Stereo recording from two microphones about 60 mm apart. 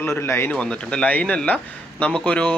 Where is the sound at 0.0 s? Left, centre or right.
Left.